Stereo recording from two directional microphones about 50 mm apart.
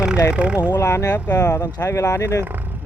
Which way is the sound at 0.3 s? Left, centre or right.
Right.